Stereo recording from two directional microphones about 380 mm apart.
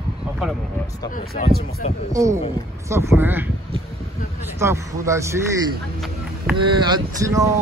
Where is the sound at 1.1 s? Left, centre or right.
Left.